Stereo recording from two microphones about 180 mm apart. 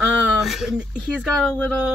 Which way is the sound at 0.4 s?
Centre (ahead or behind).